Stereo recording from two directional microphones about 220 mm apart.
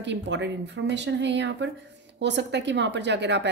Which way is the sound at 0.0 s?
55° right (ahead or behind).